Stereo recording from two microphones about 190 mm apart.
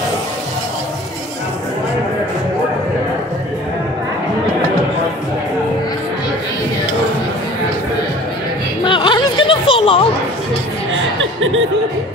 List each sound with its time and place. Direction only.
8.8 s music: 25° left (ahead or behind)
10.9 s chuckle: 90° right